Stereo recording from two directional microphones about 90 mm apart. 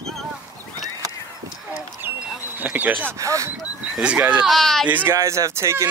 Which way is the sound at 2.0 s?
25° right (ahead or behind).